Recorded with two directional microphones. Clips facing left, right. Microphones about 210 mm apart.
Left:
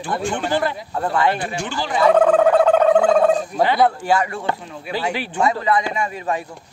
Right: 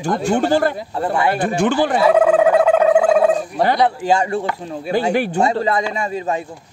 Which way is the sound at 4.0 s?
25° right (ahead or behind).